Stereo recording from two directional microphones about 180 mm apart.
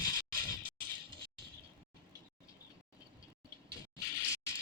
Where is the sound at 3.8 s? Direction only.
20° left (ahead or behind).